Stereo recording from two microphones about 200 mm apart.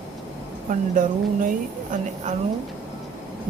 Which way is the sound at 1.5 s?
40° right (ahead or behind).